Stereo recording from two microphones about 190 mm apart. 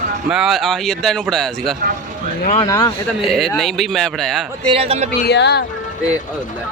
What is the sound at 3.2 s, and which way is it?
Speech, centre (ahead or behind).